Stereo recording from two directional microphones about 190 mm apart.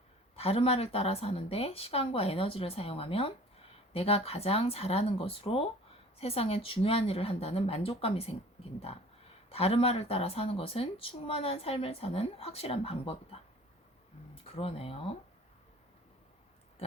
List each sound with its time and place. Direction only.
0.3 s speech: 30° left (ahead or behind)
9.5 s speech: 30° left (ahead or behind)
14.5 s speech: 30° left (ahead or behind)